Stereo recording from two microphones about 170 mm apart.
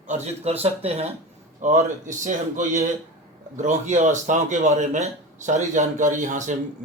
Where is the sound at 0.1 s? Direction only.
40° right (ahead or behind).